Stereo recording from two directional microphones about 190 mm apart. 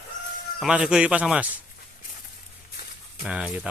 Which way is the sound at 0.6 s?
5° right (ahead or behind).